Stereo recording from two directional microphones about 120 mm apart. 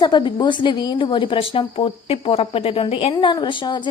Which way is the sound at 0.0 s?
40° left (ahead or behind).